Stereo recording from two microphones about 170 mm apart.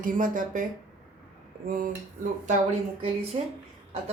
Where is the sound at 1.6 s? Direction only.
50° right (ahead or behind).